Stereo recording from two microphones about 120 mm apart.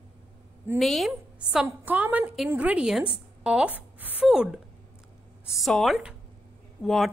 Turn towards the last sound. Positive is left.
turn(degrees=0)  # may be behind; listen again after turning